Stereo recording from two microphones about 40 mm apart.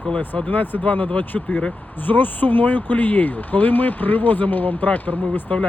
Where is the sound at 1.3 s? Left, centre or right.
Centre.